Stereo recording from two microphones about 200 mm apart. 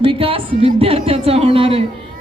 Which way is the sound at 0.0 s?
25° right (ahead or behind).